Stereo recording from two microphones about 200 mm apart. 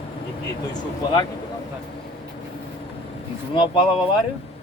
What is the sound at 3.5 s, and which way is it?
Speech, 25° left (ahead or behind).